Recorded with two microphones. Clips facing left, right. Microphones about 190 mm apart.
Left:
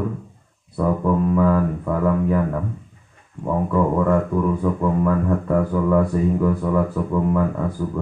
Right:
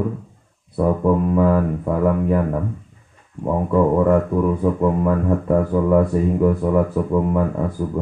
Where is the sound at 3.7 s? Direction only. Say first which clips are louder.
Right 4 dB; 20° right (ahead or behind).